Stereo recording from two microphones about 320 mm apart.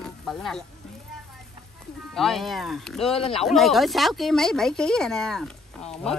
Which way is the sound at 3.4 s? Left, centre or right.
Centre.